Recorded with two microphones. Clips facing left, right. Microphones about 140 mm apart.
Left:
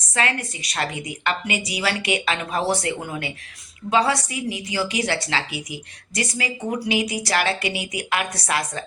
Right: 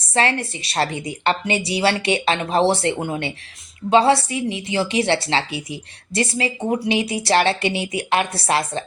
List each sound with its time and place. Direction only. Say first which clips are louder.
0.1 s a woman's voice: right 4 dB; 30° right (ahead or behind)